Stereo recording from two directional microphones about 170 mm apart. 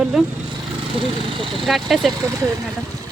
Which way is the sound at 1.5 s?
Centre (ahead or behind).